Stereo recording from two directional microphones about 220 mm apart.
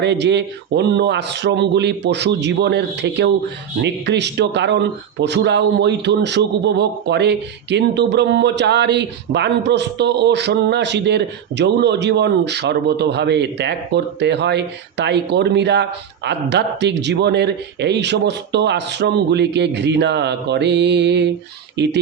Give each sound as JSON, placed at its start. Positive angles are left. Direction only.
{"t": 0.0, "sound": "speech", "side_deg": -50}